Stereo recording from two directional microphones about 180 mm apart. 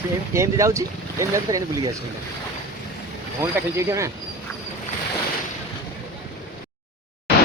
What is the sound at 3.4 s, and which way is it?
Speech, 15° right (ahead or behind).